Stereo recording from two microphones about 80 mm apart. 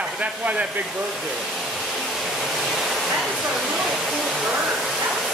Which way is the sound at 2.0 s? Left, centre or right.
Centre.